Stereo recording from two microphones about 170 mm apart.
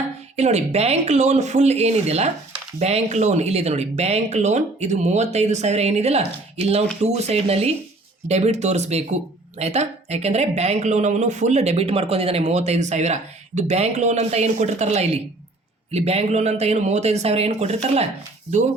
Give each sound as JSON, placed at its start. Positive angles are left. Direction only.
{"t": 0.3, "sound": "speech", "side_deg": -40}